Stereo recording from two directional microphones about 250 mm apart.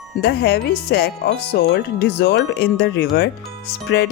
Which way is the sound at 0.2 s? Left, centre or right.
Left.